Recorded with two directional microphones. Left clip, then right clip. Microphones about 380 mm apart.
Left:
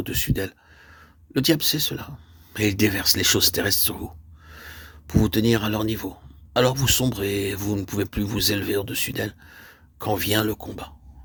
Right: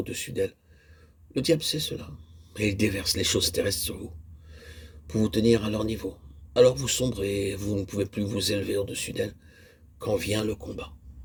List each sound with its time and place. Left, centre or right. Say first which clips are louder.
0.0 s speech: left 1 dB; left